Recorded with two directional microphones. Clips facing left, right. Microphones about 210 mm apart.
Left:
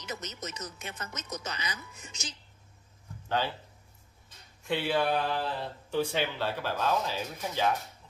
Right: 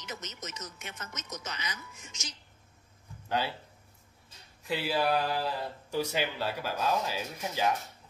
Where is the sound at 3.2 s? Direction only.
10° right (ahead or behind).